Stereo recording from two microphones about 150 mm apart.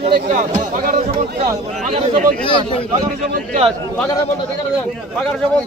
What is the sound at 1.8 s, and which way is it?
Speech, 40° right (ahead or behind).